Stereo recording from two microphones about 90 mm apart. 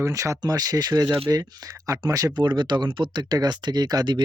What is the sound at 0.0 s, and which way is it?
Speech, 35° right (ahead or behind).